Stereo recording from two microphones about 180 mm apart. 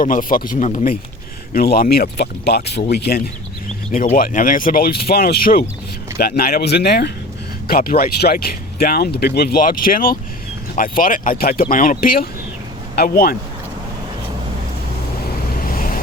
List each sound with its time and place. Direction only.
0.0 s speech: 50° left (ahead or behind)
1.5 s speech: 55° left (ahead or behind)
3.9 s speech: 50° left (ahead or behind)
15.5 s waves: 50° left (ahead or behind)